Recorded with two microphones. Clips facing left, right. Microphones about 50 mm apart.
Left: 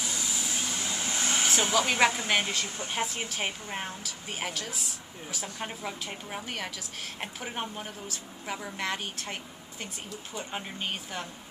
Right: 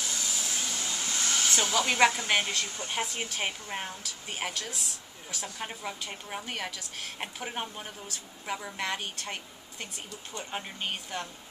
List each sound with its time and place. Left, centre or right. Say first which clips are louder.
0.0 s vehicle: left 1 dB; centre
1.6 s a woman's voice: right 1 dB; centre